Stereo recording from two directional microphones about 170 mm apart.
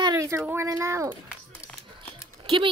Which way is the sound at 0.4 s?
15° right (ahead or behind).